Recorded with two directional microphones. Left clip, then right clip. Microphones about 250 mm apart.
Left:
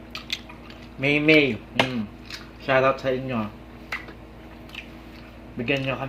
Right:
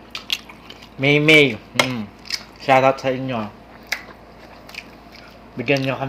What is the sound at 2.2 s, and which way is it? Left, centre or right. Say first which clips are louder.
Squish: right 9 dB; right.